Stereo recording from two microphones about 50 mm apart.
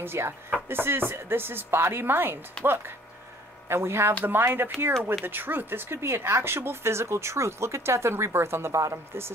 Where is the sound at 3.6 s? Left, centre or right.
Right.